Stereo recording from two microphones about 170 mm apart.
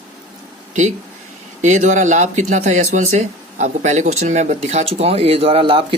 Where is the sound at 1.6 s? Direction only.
45° right (ahead or behind).